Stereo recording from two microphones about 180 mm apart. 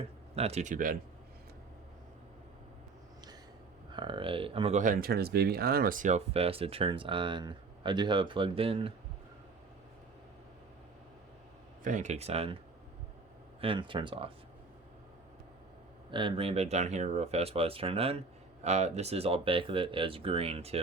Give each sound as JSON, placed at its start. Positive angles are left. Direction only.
{"t": 0.0, "sound": "speech", "side_deg": -35}
{"t": 3.9, "sound": "speech", "side_deg": -25}
{"t": 4.8, "sound": "speech", "side_deg": -50}
{"t": 11.8, "sound": "speech", "side_deg": -45}
{"t": 13.6, "sound": "speech", "side_deg": -30}
{"t": 16.1, "sound": "speech", "side_deg": -30}